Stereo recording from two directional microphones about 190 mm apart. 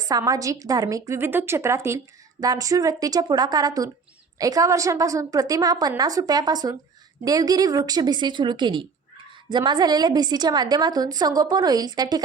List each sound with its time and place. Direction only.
0.1 s a woman's voice: 20° right (ahead or behind)